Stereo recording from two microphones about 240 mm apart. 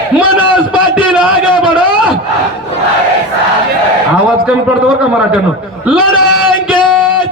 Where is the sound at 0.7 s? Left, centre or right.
Centre.